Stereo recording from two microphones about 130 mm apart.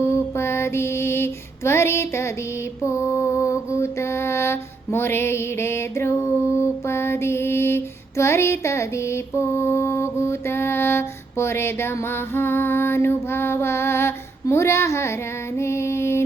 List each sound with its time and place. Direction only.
0.0 s mantra: 20° left (ahead or behind)
15.5 s female singing: 20° left (ahead or behind)